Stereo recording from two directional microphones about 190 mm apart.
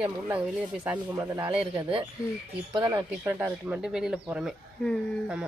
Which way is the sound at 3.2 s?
10° right (ahead or behind).